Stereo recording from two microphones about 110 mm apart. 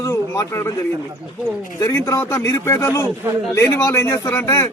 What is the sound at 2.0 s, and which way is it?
Speech, 25° left (ahead or behind).